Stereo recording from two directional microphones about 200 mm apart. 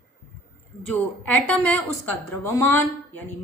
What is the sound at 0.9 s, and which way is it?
A woman's voice, 10° left (ahead or behind).